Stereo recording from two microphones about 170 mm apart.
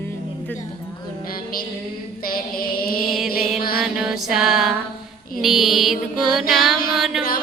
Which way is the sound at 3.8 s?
5° right (ahead or behind).